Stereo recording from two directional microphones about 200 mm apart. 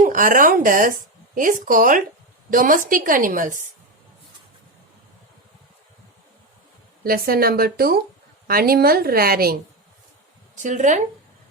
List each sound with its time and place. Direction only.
0.0 s a woman's voice: 45° right (ahead or behind)
7.0 s a woman's voice: 45° right (ahead or behind)
10.5 s speech: 40° right (ahead or behind)